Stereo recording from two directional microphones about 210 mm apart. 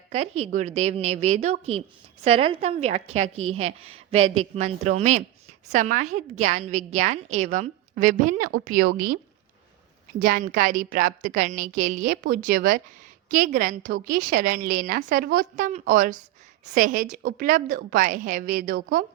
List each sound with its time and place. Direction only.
0.1 s a woman's voice: 30° right (ahead or behind)
3.3 s a woman's voice: 90° right
4.1 s a woman's voice: 30° right (ahead or behind)
10.2 s a woman's voice: 40° right (ahead or behind)